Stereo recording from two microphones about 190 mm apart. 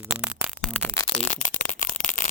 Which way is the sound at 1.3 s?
45° left (ahead or behind).